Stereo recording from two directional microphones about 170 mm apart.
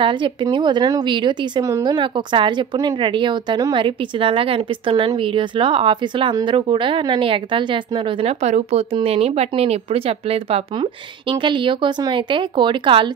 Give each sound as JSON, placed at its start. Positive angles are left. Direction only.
{"t": 0.0, "sound": "speech", "side_deg": -30}